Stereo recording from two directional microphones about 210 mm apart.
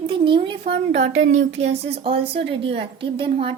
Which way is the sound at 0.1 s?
25° right (ahead or behind).